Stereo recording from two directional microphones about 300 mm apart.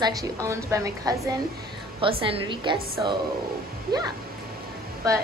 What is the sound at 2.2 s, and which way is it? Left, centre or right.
Speech, centre.